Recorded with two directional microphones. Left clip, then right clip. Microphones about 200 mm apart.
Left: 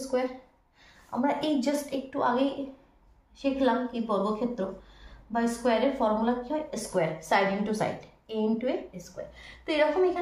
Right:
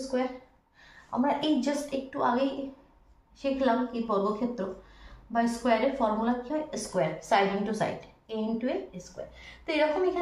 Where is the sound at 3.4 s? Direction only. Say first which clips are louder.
Left 1 dB; 20° left (ahead or behind).